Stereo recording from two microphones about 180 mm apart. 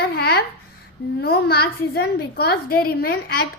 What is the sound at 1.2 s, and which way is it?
A woman's voice, 60° left (ahead or behind).